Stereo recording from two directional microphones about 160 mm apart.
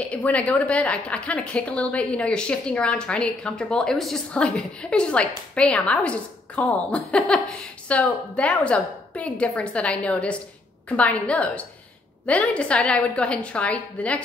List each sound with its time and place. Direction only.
0.0 s a woman's voice: 10° left (ahead or behind)